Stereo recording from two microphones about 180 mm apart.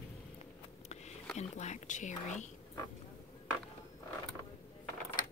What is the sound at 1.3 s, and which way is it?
A woman's voice, 40° left (ahead or behind).